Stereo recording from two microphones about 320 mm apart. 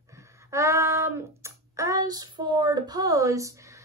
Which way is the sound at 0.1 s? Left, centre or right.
Centre.